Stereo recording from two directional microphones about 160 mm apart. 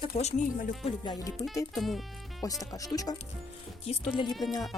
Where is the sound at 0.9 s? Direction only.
25° left (ahead or behind).